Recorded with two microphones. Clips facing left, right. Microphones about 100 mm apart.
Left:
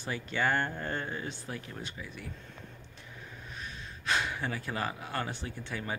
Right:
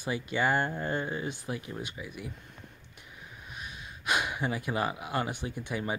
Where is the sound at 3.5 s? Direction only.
15° right (ahead or behind).